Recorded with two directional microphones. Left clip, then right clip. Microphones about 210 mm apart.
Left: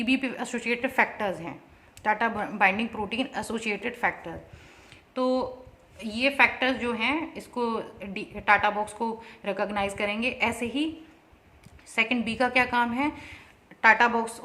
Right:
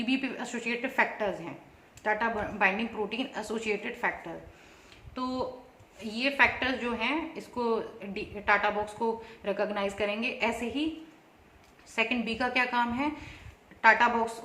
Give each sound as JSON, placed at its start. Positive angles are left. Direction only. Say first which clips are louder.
{"t": 0.0, "sound": "a woman's voice", "louder": "left 4 dB", "side_deg": 55}
{"t": 11.9, "sound": "a woman's voice", "louder": "left 4 dB", "side_deg": 50}